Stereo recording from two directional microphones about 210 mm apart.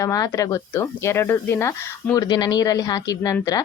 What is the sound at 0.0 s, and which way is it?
Speech, 15° left (ahead or behind).